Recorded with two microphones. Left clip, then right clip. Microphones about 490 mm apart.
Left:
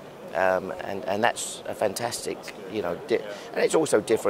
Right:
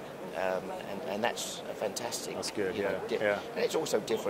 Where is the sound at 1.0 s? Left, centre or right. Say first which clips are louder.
Left 8 dB; left.